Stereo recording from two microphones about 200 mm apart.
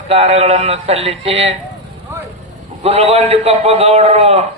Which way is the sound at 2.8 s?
30° right (ahead or behind).